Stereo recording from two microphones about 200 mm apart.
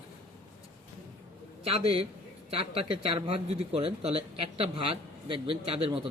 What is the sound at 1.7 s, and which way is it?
Speech, 30° right (ahead or behind).